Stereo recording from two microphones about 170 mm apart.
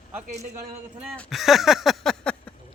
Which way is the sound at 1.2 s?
Centre (ahead or behind).